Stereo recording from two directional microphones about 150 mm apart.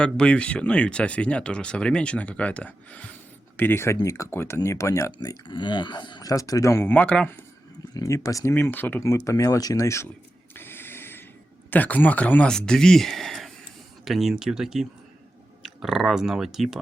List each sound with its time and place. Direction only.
0.0 s speech: 5° left (ahead or behind)
7.9 s speech: 20° left (ahead or behind)
10.5 s a sound: 15° left (ahead or behind)
11.7 s speech: 10° left (ahead or behind)